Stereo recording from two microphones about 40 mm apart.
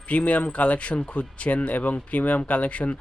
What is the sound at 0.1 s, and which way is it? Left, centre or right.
A man's voice, left.